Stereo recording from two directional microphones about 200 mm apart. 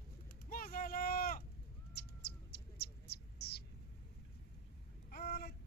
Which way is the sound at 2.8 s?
55° left (ahead or behind).